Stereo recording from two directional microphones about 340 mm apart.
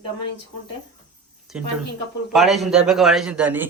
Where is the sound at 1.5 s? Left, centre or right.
Centre.